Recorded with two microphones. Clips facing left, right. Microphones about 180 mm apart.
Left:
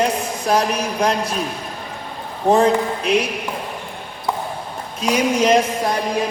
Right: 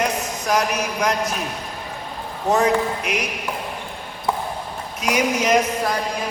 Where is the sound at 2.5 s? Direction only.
30° left (ahead or behind).